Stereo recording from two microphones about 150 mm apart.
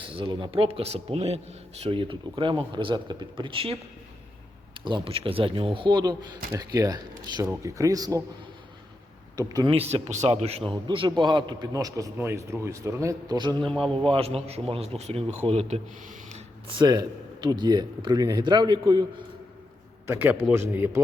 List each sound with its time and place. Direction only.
0.1 s a man's voice: 35° right (ahead or behind)
9.3 s speech: 25° right (ahead or behind)
9.7 s a man's voice: 45° right (ahead or behind); by 13.7 s 30° right (ahead or behind)
13.7 s a man's voice: 5° left (ahead or behind)
13.9 s a man's voice: 40° right (ahead or behind)
20.1 s speech: 15° right (ahead or behind)